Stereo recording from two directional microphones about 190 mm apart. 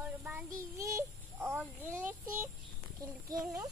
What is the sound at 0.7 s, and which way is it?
Child singing, 15° right (ahead or behind).